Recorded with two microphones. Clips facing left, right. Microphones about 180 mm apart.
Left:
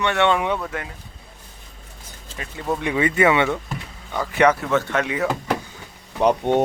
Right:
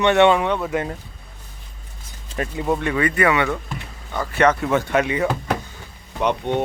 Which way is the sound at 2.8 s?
15° left (ahead or behind).